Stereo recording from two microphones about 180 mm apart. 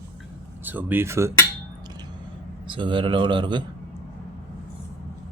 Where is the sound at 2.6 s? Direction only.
25° right (ahead or behind).